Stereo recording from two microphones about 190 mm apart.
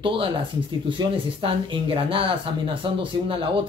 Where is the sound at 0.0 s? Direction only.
25° right (ahead or behind).